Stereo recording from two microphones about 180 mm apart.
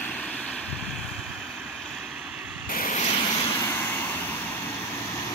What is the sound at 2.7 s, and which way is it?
Vehicle, 50° left (ahead or behind).